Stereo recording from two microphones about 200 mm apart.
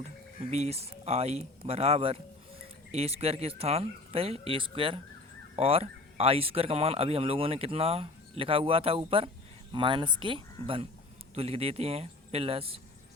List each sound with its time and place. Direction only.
0.0 s speech: 35° right (ahead or behind)